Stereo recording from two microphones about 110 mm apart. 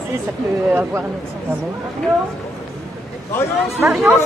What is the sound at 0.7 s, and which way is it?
Speech, 20° right (ahead or behind).